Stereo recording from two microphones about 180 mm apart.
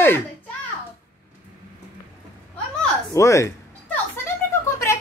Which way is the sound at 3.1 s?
15° left (ahead or behind).